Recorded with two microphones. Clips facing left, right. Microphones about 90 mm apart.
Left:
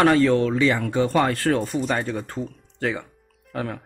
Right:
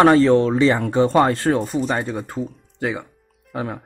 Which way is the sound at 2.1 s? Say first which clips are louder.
Right 3 dB; 15° right (ahead or behind).